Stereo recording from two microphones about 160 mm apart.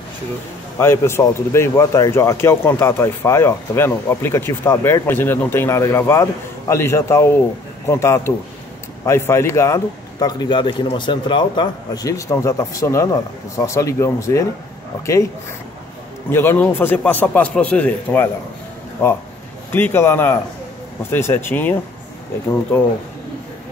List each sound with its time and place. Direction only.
0.7 s speech: 15° left (ahead or behind)
16.3 s speech: 15° left (ahead or behind)
19.7 s speech: 15° left (ahead or behind)